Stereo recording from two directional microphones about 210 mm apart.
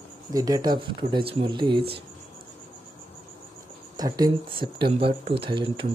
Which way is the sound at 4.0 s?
20° right (ahead or behind).